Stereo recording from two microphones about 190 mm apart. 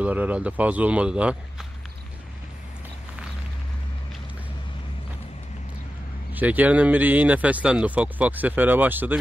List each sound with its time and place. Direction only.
0.0 s speech: 10° right (ahead or behind)
6.3 s speech: 10° right (ahead or behind)